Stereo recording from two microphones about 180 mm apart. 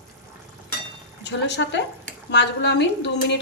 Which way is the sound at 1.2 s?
75° left (ahead or behind).